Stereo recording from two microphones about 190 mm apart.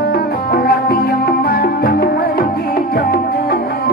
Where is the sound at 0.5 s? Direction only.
55° left (ahead or behind).